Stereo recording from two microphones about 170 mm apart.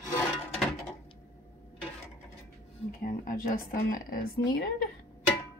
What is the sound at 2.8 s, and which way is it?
A woman's voice, 55° left (ahead or behind).